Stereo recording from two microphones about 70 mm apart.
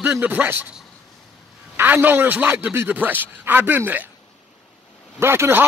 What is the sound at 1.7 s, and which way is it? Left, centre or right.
Speech, right.